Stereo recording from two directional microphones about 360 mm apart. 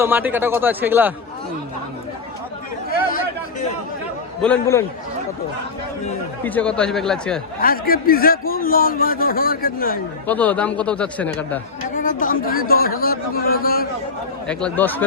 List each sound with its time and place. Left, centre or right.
0.0 s speech: centre
4.4 s speech: centre
6.4 s speech: centre
7.6 s a man's voice: left
10.2 s speech: centre
11.9 s a man's voice: left
14.4 s speech: centre